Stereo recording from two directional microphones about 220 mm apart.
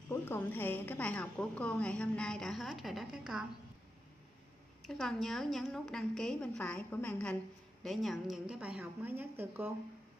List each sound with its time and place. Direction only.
0.1 s a woman's voice: 10° left (ahead or behind)
4.8 s a woman's voice: centre (ahead or behind)